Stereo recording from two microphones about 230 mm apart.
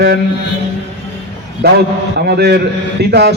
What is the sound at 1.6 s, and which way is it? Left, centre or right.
A man's voice, right.